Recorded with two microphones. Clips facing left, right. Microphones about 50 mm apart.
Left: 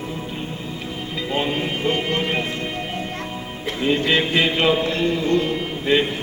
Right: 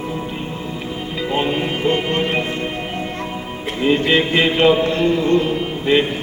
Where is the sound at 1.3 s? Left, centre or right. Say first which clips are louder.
Right 3 dB; centre.